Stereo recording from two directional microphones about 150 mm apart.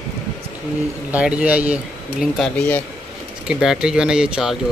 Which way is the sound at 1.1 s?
10° right (ahead or behind).